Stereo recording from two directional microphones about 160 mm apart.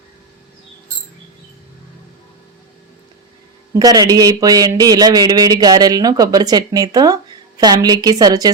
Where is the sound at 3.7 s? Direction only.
25° right (ahead or behind).